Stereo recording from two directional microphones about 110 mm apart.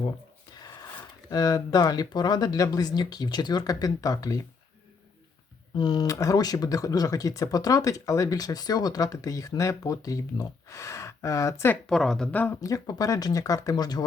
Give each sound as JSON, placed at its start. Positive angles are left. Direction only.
{"t": 0.5, "sound": "a sound", "side_deg": 35}
{"t": 1.3, "sound": "speech", "side_deg": 35}
{"t": 5.7, "sound": "speech", "side_deg": 40}
{"t": 11.9, "sound": "speech", "side_deg": 5}
{"t": 12.5, "sound": "speech", "side_deg": 30}